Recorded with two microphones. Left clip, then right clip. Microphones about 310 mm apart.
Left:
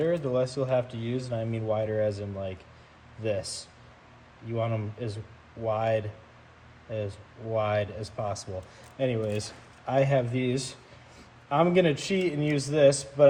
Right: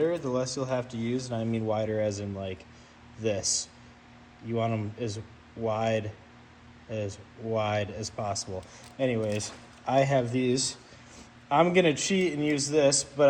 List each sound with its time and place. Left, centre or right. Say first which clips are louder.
0.0 s speech: left 1 dB; centre